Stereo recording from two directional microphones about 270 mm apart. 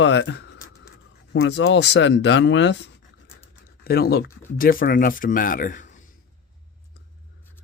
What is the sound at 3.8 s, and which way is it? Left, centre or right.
Speech, left.